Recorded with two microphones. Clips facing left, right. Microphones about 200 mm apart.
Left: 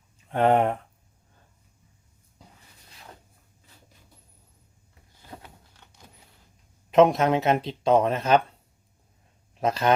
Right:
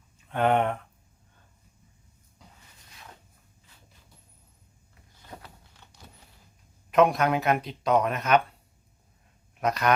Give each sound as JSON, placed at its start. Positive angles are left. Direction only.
{"t": 0.3, "sound": "speech", "side_deg": 30}
{"t": 6.9, "sound": "speech", "side_deg": 25}
{"t": 9.6, "sound": "speech", "side_deg": 25}